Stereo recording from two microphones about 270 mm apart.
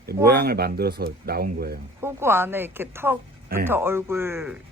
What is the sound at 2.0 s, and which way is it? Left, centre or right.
A woman's voice, centre.